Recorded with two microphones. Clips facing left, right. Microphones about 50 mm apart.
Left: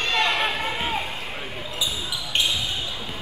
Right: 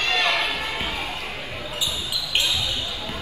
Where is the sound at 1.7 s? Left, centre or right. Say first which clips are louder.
Even; left.